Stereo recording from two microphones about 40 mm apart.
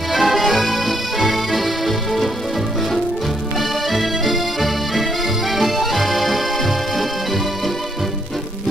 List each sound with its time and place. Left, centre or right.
0.1 s music: centre
3.5 s music: centre